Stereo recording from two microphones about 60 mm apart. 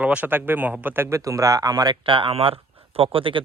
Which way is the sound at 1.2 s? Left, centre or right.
Right.